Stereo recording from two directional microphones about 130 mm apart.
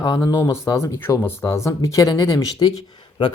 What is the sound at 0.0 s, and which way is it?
Speech, 30° left (ahead or behind).